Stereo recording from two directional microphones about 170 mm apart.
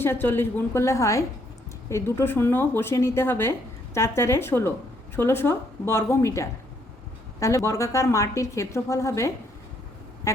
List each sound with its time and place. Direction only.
0.0 s a woman's voice: 10° left (ahead or behind)